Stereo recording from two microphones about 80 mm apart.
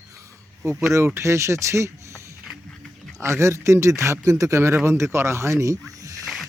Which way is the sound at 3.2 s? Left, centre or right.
Right.